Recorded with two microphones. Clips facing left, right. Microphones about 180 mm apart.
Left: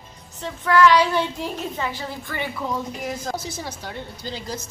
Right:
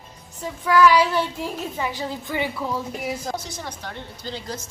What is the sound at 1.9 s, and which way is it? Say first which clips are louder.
A woman's voice: right 2 dB; 15° right (ahead or behind).